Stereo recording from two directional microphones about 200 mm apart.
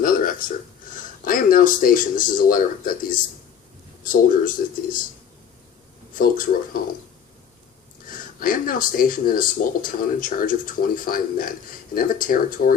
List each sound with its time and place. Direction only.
0.0 s a sound: 45° left (ahead or behind)
0.9 s speech: 45° left (ahead or behind)
6.1 s speech: 45° left (ahead or behind)
8.1 s speech: 45° left (ahead or behind)